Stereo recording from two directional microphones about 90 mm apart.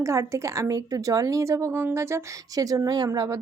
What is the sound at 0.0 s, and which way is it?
A woman's voice, 35° right (ahead or behind).